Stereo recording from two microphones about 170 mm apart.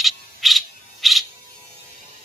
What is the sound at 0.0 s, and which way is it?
Music, centre (ahead or behind).